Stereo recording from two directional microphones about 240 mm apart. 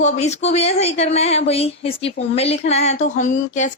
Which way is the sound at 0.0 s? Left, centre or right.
Left.